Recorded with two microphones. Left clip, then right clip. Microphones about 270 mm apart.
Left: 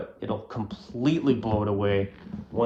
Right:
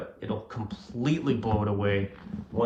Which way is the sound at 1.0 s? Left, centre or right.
Centre.